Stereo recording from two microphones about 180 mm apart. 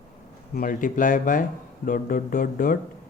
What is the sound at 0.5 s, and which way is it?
Speech, 50° left (ahead or behind).